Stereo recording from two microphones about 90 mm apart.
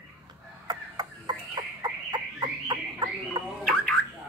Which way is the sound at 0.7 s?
50° right (ahead or behind).